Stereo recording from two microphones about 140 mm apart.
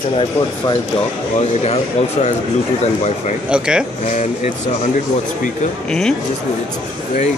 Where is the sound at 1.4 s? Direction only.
50° left (ahead or behind).